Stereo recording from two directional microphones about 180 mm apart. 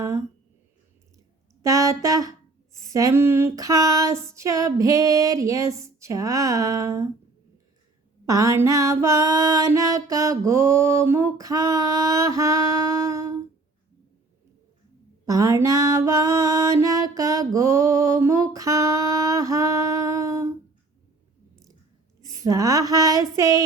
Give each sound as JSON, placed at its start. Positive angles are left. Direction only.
{"t": 1.6, "sound": "music", "side_deg": -20}
{"t": 8.3, "sound": "music", "side_deg": -15}
{"t": 15.3, "sound": "music", "side_deg": -20}
{"t": 22.4, "sound": "a sound", "side_deg": -20}